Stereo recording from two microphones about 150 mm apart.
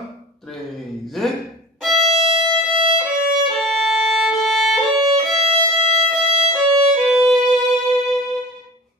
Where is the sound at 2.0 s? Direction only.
40° right (ahead or behind).